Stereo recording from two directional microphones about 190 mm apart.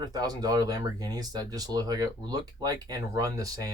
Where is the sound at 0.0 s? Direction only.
20° right (ahead or behind).